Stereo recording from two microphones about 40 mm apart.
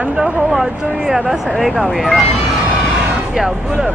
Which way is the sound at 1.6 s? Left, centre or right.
Centre.